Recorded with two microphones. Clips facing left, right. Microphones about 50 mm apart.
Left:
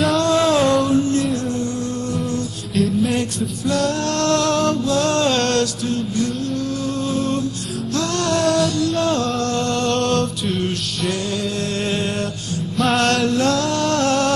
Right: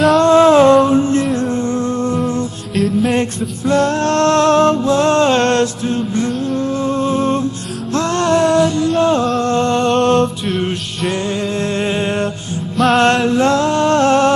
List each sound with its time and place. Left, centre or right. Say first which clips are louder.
0.2 s music: right 9 dB; right
2.7 s music: right 3 dB; centre
3.2 s male singing: right 4 dB; right
6.9 s music: right 6 dB; right
11.6 s a sound: right 4 dB; right
12.9 s music: right 5 dB; right